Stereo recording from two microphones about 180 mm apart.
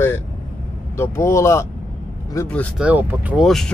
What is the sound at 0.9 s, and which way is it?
Speech, 15° left (ahead or behind).